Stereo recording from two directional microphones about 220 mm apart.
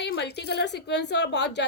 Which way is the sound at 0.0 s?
50° left (ahead or behind).